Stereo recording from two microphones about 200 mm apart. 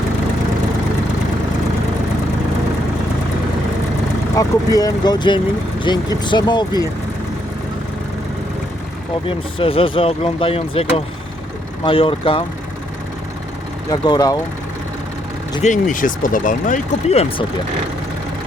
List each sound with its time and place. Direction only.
4.4 s speech: 20° left (ahead or behind)
9.2 s speech: 25° left (ahead or behind)
13.9 s speech: 20° left (ahead or behind)
15.6 s speech: 40° left (ahead or behind)